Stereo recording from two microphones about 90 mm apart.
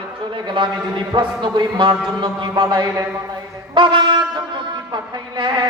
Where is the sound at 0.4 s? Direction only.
60° right (ahead or behind).